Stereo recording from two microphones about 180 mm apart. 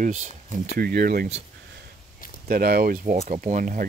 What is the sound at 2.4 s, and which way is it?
Speech, 55° right (ahead or behind).